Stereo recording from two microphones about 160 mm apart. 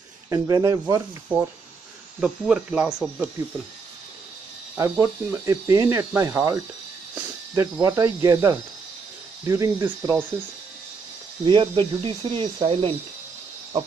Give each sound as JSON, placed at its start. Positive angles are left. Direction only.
{"t": 0.3, "sound": "speech", "side_deg": -20}
{"t": 1.3, "sound": "speech", "side_deg": -10}
{"t": 4.7, "sound": "speech", "side_deg": -15}
{"t": 7.2, "sound": "cricket", "side_deg": -20}
{"t": 7.8, "sound": "speech", "side_deg": -20}
{"t": 11.4, "sound": "speech", "side_deg": -30}